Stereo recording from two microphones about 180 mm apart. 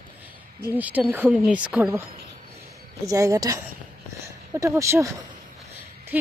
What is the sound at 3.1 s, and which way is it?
A woman's voice, 20° right (ahead or behind).